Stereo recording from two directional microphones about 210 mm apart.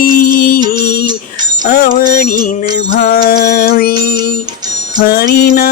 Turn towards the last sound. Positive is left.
turn(degrees=45)  # may be behind; listen again after turning